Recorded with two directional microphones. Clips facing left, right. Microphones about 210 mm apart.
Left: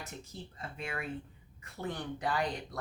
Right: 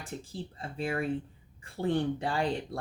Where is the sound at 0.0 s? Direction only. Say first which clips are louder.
Right 6 dB; 30° right (ahead or behind).